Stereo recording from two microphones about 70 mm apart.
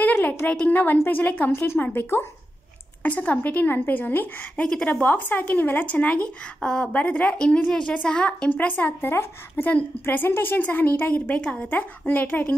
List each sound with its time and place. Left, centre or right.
0.0 s a sound: left
0.5 s a woman's voice: left
1.8 s speech: left
3.0 s a woman's voice: left
4.6 s a woman's voice: centre
5.0 s a woman's voice: left
8.5 s a woman's voice: left